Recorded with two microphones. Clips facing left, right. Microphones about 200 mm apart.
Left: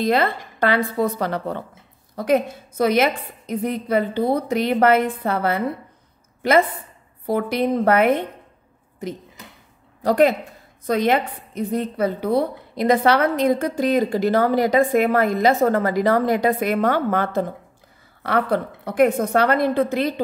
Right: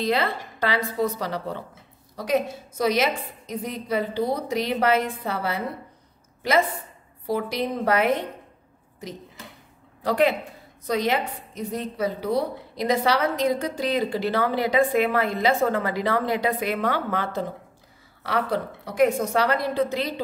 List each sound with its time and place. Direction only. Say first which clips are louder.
0.0 s a woman's voice: left 4 dB; 50° left (ahead or behind)
10.0 s a woman's voice: left 5 dB; 45° left (ahead or behind)